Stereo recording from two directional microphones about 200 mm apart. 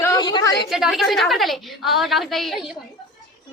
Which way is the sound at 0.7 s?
Centre (ahead or behind).